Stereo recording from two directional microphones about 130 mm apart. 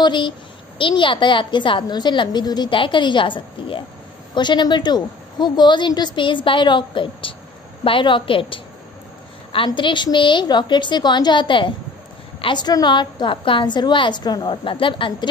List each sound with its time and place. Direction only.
0.0 s a child's voice: 35° left (ahead or behind)
9.7 s a woman's voice: 35° left (ahead or behind)